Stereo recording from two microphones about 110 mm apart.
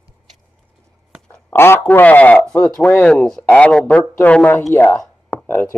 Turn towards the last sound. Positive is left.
turn(degrees=20)  # may be behind; listen again after turning